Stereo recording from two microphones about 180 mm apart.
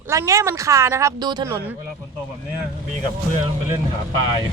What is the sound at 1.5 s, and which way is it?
Speech, 10° right (ahead or behind).